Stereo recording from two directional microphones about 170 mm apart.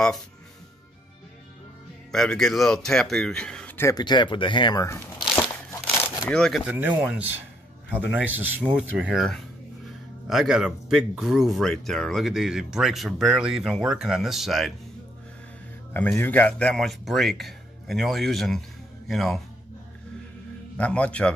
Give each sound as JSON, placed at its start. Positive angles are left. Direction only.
{"t": 2.1, "sound": "speech", "side_deg": 5}
{"t": 3.9, "sound": "speech", "side_deg": 25}
{"t": 6.2, "sound": "speech", "side_deg": 5}
{"t": 7.0, "sound": "a man's voice", "side_deg": -10}
{"t": 15.9, "sound": "speech", "side_deg": 10}
{"t": 20.7, "sound": "a man's voice", "side_deg": 5}